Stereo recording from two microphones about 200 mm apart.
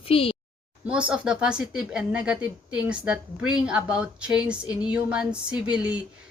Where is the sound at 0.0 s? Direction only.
30° left (ahead or behind).